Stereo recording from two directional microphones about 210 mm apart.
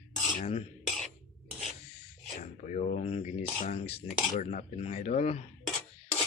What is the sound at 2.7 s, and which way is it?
Speech, 35° left (ahead or behind).